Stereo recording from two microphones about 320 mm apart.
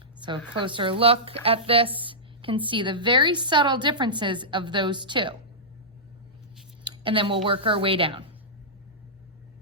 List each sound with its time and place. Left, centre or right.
0.2 s speech: centre
6.8 s a sound: centre
7.4 s speech: centre